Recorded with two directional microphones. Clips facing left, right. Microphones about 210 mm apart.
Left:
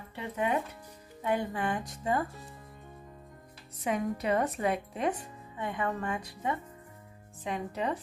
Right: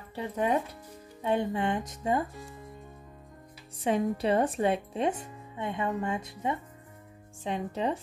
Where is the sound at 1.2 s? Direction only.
25° right (ahead or behind).